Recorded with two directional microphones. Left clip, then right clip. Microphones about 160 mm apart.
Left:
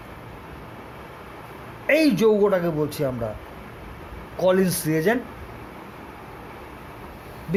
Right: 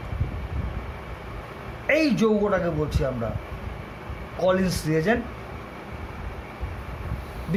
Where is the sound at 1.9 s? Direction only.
55° left (ahead or behind).